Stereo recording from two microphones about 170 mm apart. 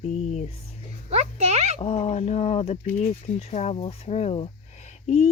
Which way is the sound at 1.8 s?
35° left (ahead or behind).